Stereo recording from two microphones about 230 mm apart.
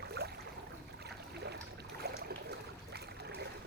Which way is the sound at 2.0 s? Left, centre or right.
Right.